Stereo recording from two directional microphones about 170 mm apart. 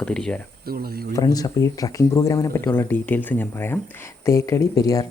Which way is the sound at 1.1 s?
20° left (ahead or behind).